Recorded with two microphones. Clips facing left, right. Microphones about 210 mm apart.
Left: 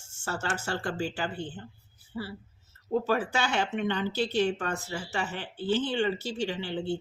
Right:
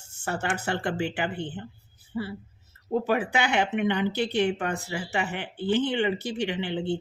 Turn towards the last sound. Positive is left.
turn(degrees=-20)  # may be behind; listen again after turning